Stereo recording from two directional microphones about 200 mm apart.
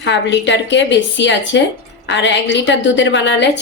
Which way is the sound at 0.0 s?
60° left (ahead or behind).